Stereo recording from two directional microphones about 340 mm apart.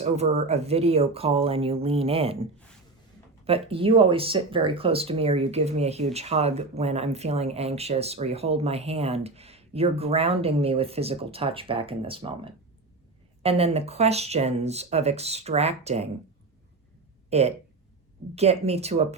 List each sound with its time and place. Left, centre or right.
0.0 s speech: centre
17.2 s speech: centre